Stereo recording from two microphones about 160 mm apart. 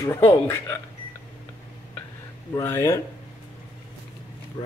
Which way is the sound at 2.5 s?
15° left (ahead or behind).